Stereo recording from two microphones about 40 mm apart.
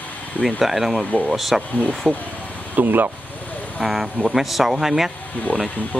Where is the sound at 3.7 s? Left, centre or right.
Centre.